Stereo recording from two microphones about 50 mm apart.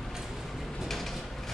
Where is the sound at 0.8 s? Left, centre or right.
Centre.